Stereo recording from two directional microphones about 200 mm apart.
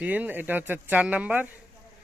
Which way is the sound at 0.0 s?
5° right (ahead or behind).